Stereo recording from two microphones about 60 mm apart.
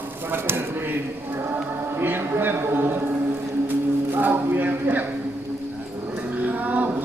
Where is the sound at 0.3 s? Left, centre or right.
Right.